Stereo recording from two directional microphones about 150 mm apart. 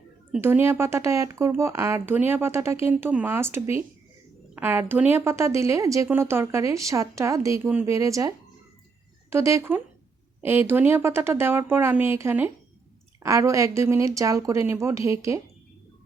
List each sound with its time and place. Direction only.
0.4 s a woman's voice: 15° right (ahead or behind)
9.3 s a woman's voice: 20° right (ahead or behind)